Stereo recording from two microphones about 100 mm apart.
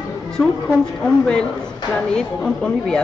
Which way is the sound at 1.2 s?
10° left (ahead or behind).